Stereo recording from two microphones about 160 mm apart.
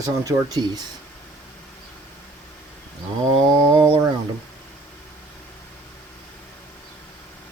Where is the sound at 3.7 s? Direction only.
30° right (ahead or behind).